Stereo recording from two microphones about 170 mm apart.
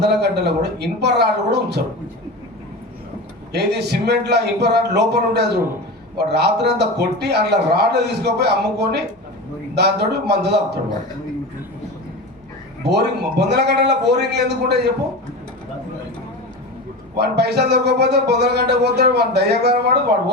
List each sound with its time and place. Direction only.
0.0 s speech: 75° right (ahead or behind)
3.5 s speech: 75° right (ahead or behind)
12.8 s speech: 75° right (ahead or behind)
17.2 s speech: 75° right (ahead or behind)